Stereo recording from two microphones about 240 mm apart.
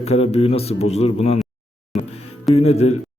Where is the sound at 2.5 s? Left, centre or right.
Left.